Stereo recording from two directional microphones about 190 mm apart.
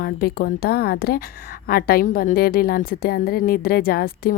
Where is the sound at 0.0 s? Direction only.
50° left (ahead or behind).